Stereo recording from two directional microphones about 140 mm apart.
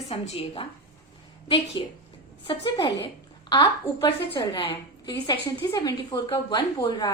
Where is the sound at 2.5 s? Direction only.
40° left (ahead or behind).